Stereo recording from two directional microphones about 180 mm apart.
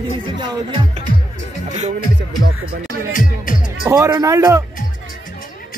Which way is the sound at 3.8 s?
15° right (ahead or behind).